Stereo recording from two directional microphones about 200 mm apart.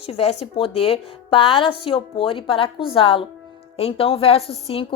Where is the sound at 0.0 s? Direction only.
30° left (ahead or behind).